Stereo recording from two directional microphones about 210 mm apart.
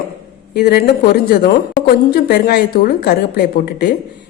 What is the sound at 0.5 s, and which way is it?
A woman's voice, 50° left (ahead or behind).